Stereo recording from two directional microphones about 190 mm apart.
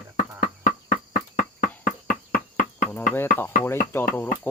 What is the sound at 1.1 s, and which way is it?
Insect, 45° left (ahead or behind).